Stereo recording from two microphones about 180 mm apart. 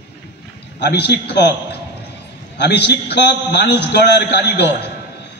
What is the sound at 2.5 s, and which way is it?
A man's voice, 70° left (ahead or behind).